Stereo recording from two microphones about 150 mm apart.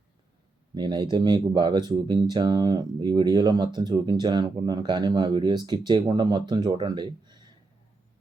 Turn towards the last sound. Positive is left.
turn(degrees=-30)  # may be behind; listen again after turning